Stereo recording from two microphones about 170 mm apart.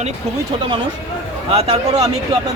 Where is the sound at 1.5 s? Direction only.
40° right (ahead or behind).